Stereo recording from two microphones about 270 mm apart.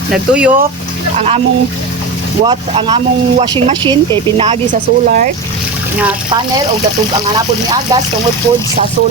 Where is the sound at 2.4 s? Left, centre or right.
Centre.